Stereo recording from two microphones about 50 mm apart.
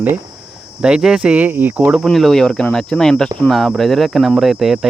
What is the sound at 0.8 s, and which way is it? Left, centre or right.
Speech, centre.